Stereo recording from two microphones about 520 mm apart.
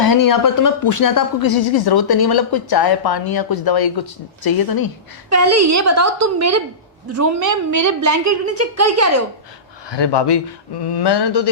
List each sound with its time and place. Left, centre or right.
0.0 s speech: left
5.3 s a woman's voice: right
9.9 s speech: left